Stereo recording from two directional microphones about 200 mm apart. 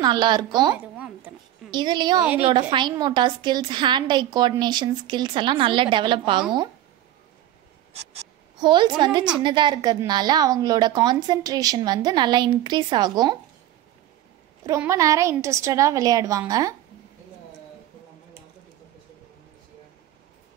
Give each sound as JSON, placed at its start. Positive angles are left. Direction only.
{"t": 0.0, "sound": "a woman's voice", "side_deg": -20}
{"t": 0.7, "sound": "a sound", "side_deg": -5}
{"t": 1.7, "sound": "a woman's voice", "side_deg": -20}
{"t": 8.1, "sound": "a woman's voice", "side_deg": -25}
{"t": 14.7, "sound": "a woman's voice", "side_deg": -15}